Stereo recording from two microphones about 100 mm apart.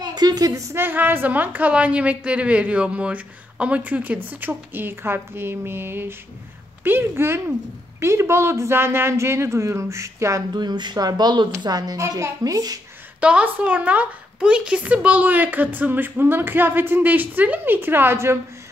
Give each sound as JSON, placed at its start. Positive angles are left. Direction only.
{"t": 0.0, "sound": "a woman's voice", "side_deg": -45}
{"t": 0.7, "sound": "a woman's voice", "side_deg": -20}
{"t": 10.5, "sound": "a child's voice", "side_deg": -45}
{"t": 13.2, "sound": "a woman's voice", "side_deg": -10}